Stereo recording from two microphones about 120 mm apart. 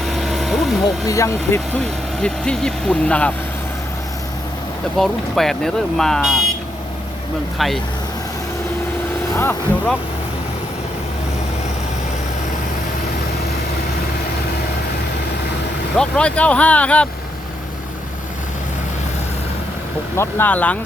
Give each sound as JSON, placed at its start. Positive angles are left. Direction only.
{"t": 0.0, "sound": "vehicle", "side_deg": 0}
{"t": 1.0, "sound": "speech", "side_deg": 25}
{"t": 1.7, "sound": "speech", "side_deg": 5}
{"t": 4.9, "sound": "speech", "side_deg": 5}
{"t": 7.6, "sound": "speech", "side_deg": 0}
{"t": 9.3, "sound": "speech", "side_deg": 20}
{"t": 16.0, "sound": "speech", "side_deg": 10}
{"t": 20.1, "sound": "speech", "side_deg": 15}